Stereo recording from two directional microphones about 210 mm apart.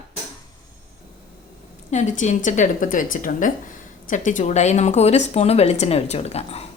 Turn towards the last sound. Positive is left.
turn(degrees=30)  # may be behind; listen again after turning